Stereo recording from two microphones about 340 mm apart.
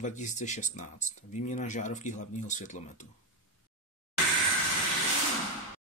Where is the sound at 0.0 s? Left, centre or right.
Left.